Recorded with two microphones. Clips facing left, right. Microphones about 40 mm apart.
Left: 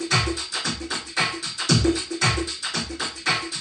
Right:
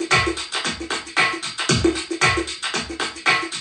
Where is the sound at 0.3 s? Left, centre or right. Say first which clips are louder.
Right 3 dB; right.